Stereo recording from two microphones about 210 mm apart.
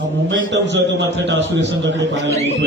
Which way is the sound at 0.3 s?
60° right (ahead or behind).